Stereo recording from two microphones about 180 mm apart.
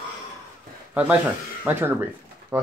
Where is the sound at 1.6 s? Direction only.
10° right (ahead or behind).